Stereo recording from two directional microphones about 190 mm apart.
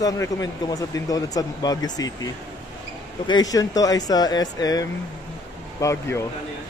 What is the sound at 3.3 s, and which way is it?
A man's voice, 20° left (ahead or behind).